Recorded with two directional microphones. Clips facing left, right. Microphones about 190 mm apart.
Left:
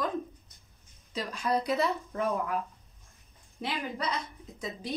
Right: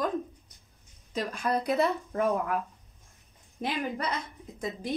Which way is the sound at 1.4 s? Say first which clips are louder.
Right 1 dB; 55° right (ahead or behind).